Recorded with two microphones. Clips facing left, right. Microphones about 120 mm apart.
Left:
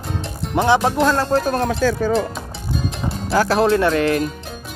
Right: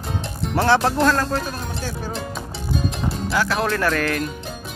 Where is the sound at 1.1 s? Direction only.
30° left (ahead or behind).